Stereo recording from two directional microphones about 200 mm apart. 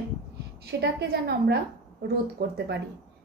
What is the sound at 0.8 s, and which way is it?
A woman's voice, 55° right (ahead or behind).